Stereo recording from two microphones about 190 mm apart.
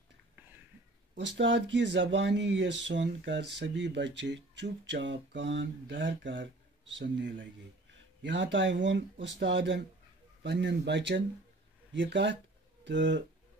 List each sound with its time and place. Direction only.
1.1 s speech: 70° right (ahead or behind)